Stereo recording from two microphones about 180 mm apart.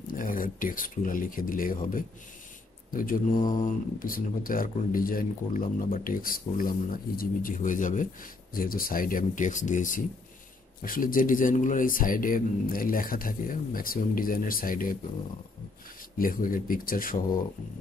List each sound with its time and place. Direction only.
0.0 s a man's voice: 50° left (ahead or behind)
16.2 s a man's voice: 50° left (ahead or behind)